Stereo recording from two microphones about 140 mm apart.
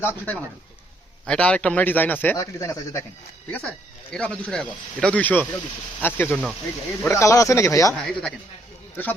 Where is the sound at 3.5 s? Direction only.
10° left (ahead or behind).